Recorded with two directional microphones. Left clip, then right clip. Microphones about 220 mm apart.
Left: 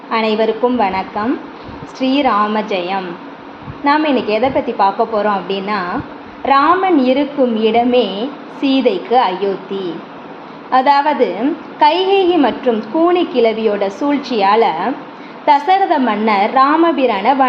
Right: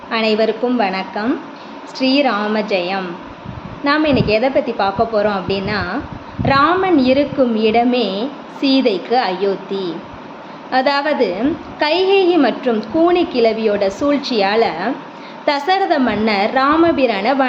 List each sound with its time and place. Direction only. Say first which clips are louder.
0.1 s a woman's voice: left 1 dB; 5° right (ahead or behind)